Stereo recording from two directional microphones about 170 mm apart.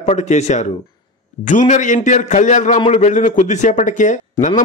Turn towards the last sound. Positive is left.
turn(degrees=45)  # may be behind; listen again after turning